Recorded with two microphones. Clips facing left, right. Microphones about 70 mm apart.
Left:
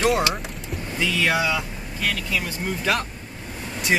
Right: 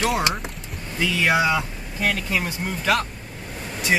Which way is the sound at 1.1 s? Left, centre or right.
Right.